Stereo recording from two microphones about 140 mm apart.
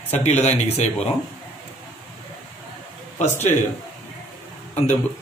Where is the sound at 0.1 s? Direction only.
55° left (ahead or behind).